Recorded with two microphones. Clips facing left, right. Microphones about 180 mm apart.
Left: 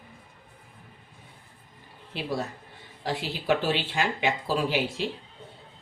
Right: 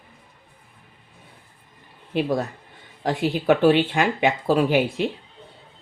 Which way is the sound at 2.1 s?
55° right (ahead or behind).